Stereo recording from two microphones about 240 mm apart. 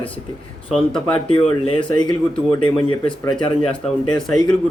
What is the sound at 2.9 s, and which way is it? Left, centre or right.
Speech, centre.